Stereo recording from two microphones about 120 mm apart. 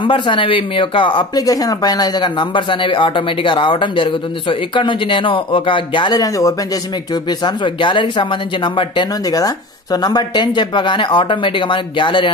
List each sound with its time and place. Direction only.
0.0 s speech: 45° left (ahead or behind)
1.4 s speech: 30° left (ahead or behind)
7.2 s speech: 40° left (ahead or behind)